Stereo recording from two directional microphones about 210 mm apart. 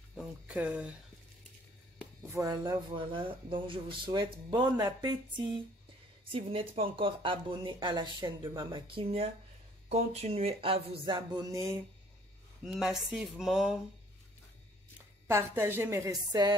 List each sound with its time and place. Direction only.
0.1 s speech: 5° right (ahead or behind)
2.3 s speech: 15° right (ahead or behind)
6.3 s speech: 25° right (ahead or behind)
12.6 s speech: centre (ahead or behind)
15.2 s a woman's voice: 10° right (ahead or behind)